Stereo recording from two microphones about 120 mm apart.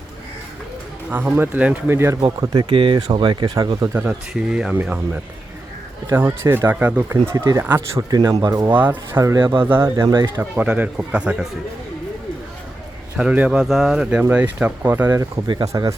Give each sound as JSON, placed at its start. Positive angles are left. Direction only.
{"t": 1.1, "sound": "speech", "side_deg": -15}
{"t": 2.4, "sound": "speech", "side_deg": -35}
{"t": 3.9, "sound": "speech", "side_deg": -10}
{"t": 7.3, "sound": "speech", "side_deg": -25}
{"t": 8.8, "sound": "speech", "side_deg": -15}
{"t": 9.2, "sound": "speech", "side_deg": -25}
{"t": 10.3, "sound": "speech", "side_deg": -10}
{"t": 13.1, "sound": "speech", "side_deg": -10}
{"t": 15.7, "sound": "speech", "side_deg": -30}